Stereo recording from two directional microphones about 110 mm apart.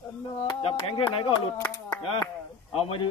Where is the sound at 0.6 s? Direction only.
55° left (ahead or behind).